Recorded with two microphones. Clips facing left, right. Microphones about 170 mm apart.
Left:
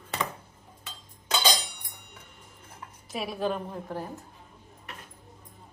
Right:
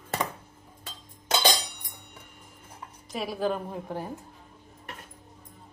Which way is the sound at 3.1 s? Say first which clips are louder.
Right 1 dB; centre (ahead or behind).